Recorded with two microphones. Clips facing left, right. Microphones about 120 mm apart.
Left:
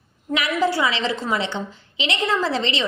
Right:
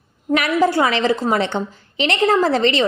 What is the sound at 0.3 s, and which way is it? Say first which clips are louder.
A woman's voice: right 5 dB; 50° right (ahead or behind).